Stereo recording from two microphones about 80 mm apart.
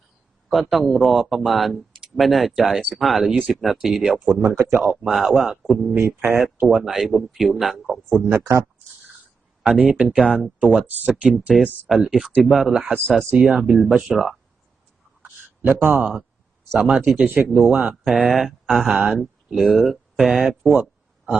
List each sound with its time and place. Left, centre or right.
0.5 s speech: centre
4.4 s speech: right
4.8 s speech: centre
5.9 s speech: right
6.7 s speech: centre
8.3 s speech: right
9.6 s speech: centre
10.2 s speech: centre
11.3 s speech: centre
15.6 s speech: right
16.7 s speech: centre